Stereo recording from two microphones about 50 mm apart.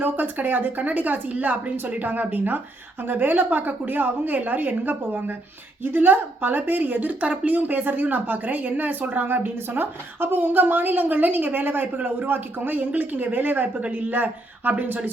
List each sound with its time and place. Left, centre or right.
0.0 s a woman's voice: right